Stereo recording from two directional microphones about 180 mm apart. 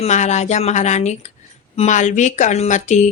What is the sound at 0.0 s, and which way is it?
A woman's voice, 40° left (ahead or behind).